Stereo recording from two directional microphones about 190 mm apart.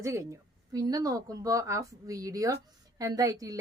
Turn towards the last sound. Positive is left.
turn(degrees=-20)  # may be behind; listen again after turning